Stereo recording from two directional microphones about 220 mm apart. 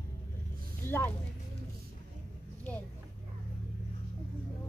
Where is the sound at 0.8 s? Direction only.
10° left (ahead or behind).